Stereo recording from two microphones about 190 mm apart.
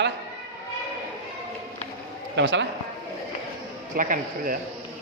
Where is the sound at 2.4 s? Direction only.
70° right (ahead or behind).